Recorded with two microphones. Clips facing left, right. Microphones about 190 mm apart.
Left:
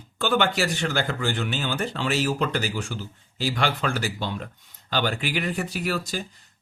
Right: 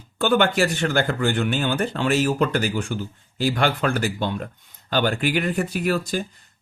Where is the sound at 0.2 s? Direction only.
50° right (ahead or behind).